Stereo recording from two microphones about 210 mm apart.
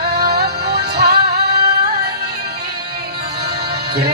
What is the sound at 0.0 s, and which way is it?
Music, 45° right (ahead or behind).